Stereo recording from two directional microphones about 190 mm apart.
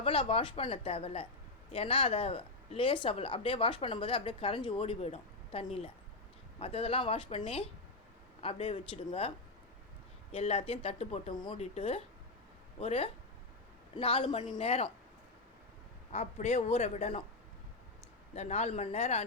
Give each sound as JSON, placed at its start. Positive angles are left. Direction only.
{"t": 0.0, "sound": "a woman's voice", "side_deg": 30}
{"t": 10.3, "sound": "a woman's voice", "side_deg": 30}
{"t": 11.3, "sound": "a woman's voice", "side_deg": 25}
{"t": 16.1, "sound": "a woman's voice", "side_deg": 35}
{"t": 18.3, "sound": "a woman's voice", "side_deg": 35}